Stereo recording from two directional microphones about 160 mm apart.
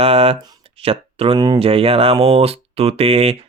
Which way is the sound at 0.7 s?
35° right (ahead or behind).